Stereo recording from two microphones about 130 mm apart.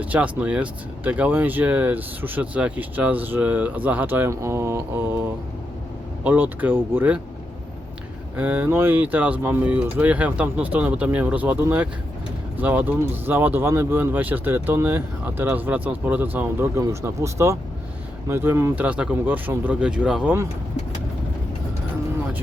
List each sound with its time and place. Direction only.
0.0 s speech: 10° right (ahead or behind)
6.2 s speech: 15° right (ahead or behind)
8.4 s speech: 15° right (ahead or behind)